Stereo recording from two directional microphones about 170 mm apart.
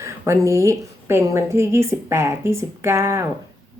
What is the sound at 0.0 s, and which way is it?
A woman's voice, 15° right (ahead or behind).